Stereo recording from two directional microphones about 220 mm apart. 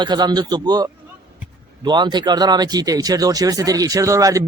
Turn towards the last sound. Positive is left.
turn(degrees=-15)  # may be behind; listen again after turning